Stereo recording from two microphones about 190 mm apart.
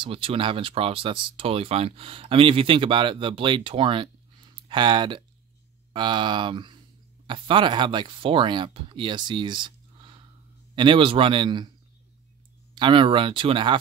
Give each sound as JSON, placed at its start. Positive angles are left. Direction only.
{"t": 0.0, "sound": "speech", "side_deg": -30}
{"t": 10.7, "sound": "speech", "side_deg": -25}
{"t": 12.7, "sound": "speech", "side_deg": -25}